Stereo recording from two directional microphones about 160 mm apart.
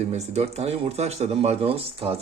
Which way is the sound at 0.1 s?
40° right (ahead or behind).